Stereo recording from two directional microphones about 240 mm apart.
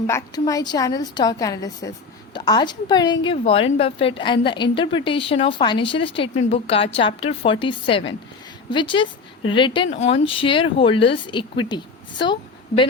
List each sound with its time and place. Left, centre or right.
0.1 s a woman's voice: centre